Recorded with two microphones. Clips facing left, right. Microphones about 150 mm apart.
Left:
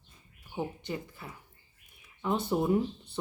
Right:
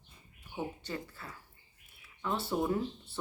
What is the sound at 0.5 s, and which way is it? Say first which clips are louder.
Speech: left 3 dB; 20° left (ahead or behind).